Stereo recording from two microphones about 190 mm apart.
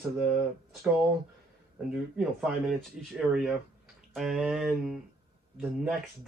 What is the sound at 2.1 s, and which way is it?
Speech, centre (ahead or behind).